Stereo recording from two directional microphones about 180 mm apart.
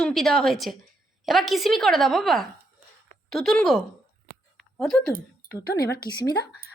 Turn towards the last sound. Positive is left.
turn(degrees=60)  # may be behind; listen again after turning